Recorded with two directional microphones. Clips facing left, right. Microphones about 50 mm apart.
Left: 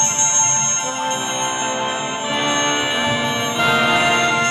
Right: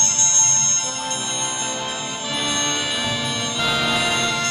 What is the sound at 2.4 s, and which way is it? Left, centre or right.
Music, left.